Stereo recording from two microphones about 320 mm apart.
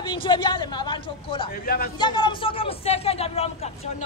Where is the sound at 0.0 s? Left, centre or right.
Centre.